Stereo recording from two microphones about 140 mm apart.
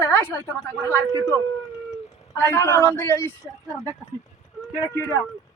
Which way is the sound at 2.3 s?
20° left (ahead or behind).